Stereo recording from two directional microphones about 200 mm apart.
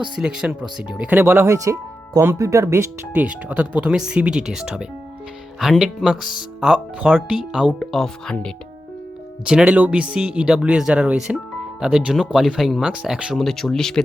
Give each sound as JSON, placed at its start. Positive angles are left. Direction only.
{"t": 0.2, "sound": "speech", "side_deg": -5}